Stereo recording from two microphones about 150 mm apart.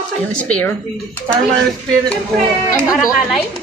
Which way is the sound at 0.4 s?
5° left (ahead or behind).